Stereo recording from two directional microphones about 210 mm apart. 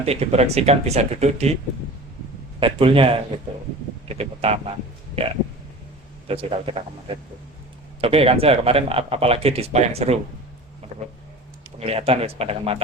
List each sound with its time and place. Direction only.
0.0 s speech: 30° right (ahead or behind)
2.6 s speech: 25° right (ahead or behind)
8.0 s speech: 25° right (ahead or behind)
11.8 s speech: 30° right (ahead or behind)